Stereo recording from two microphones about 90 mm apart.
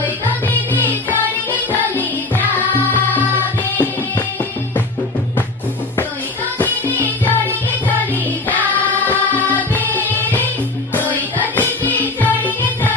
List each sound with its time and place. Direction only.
1.7 s music: 20° left (ahead or behind)
6.6 s music: 20° left (ahead or behind)
8.9 s music: 20° left (ahead or behind)